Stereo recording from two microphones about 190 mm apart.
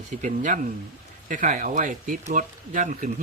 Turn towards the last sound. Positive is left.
turn(degrees=-40)  # may be behind; listen again after turning